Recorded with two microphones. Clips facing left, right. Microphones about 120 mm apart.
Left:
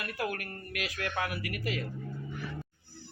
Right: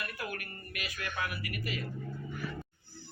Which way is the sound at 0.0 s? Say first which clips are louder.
Left 5 dB; 85° left.